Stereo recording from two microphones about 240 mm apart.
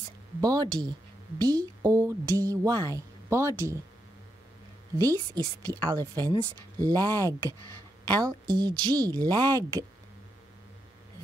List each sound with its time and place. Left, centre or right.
0.4 s speech: centre
4.9 s speech: centre